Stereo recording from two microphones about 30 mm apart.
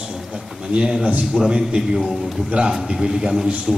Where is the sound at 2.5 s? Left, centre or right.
Right.